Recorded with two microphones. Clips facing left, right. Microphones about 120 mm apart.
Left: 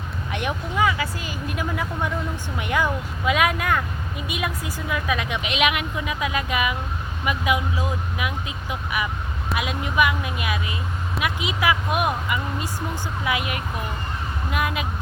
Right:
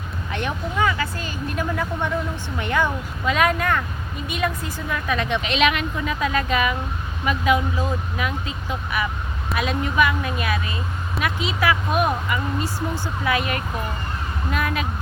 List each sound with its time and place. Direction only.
0.3 s a woman's voice: 10° left (ahead or behind)